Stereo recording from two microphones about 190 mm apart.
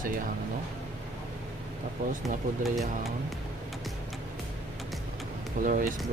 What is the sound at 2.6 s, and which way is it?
Speech, centre (ahead or behind).